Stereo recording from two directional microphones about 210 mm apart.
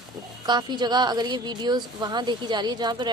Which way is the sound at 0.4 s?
20° right (ahead or behind).